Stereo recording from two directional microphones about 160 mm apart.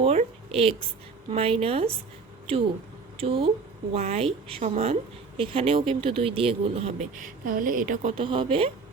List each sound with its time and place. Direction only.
0.0 s a sound: 40° right (ahead or behind)
1.3 s speech: 40° right (ahead or behind)
3.2 s speech: 35° right (ahead or behind)
7.2 s speech: 60° right (ahead or behind)
8.1 s speech: 35° right (ahead or behind)